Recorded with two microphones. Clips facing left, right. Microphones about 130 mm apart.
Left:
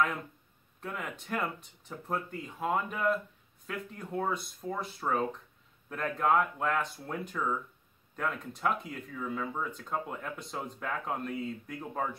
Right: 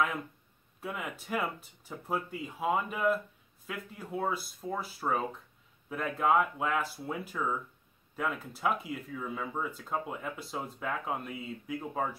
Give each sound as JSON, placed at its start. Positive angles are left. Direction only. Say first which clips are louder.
{"t": 0.7, "sound": "speech", "louder": "right 1 dB", "side_deg": -5}